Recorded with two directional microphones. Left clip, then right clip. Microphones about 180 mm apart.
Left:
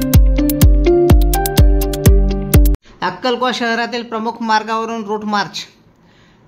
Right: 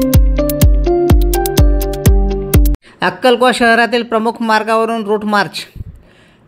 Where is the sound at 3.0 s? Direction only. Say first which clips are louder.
Right 6 dB; 30° right (ahead or behind).